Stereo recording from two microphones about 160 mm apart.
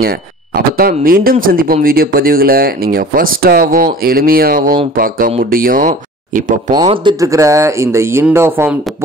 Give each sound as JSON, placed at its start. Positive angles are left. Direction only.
{"t": 0.7, "sound": "speech", "side_deg": -65}
{"t": 6.7, "sound": "speech", "side_deg": -30}